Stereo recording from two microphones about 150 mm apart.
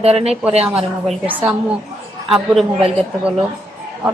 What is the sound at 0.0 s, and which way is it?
Speech, 45° right (ahead or behind).